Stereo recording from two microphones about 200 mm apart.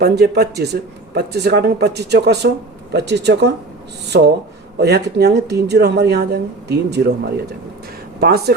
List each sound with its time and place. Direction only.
0.0 s speech: 55° right (ahead or behind)
4.8 s speech: 55° right (ahead or behind)
8.2 s speech: 50° right (ahead or behind)